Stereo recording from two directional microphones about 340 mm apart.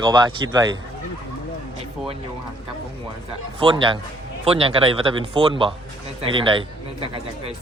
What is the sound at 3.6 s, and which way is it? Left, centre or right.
Speech, centre.